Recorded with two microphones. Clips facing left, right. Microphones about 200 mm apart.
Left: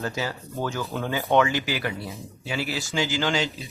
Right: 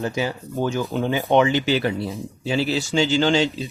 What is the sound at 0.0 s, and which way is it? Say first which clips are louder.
Speech: right 5 dB; 15° right (ahead or behind).